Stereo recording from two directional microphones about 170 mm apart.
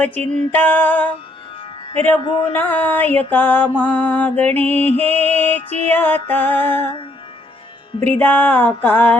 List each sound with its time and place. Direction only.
0.0 s mantra: 10° left (ahead or behind)
2.2 s speech: 30° left (ahead or behind)
2.5 s mantra: 10° left (ahead or behind)
8.1 s mantra: 10° left (ahead or behind)